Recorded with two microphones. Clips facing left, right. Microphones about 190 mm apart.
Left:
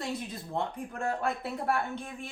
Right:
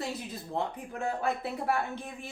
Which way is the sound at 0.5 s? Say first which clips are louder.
Even; centre (ahead or behind).